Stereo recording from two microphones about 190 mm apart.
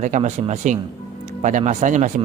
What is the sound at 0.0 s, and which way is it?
A man's voice, 40° right (ahead or behind).